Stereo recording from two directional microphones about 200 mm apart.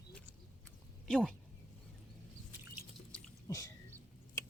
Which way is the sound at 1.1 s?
5° left (ahead or behind).